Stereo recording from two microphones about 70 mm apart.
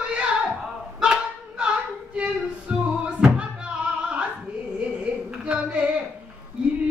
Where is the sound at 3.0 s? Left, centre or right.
Centre.